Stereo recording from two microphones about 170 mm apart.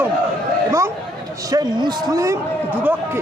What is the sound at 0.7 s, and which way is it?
A man's voice, 20° right (ahead or behind).